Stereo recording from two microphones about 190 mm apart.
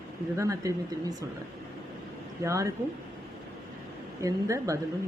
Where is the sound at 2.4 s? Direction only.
15° right (ahead or behind).